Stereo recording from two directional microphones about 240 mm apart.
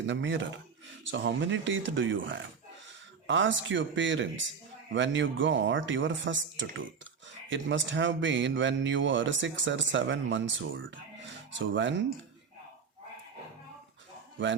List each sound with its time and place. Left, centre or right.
0.0 s a man's voice: right